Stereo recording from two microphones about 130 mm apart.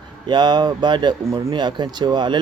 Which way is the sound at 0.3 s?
35° right (ahead or behind).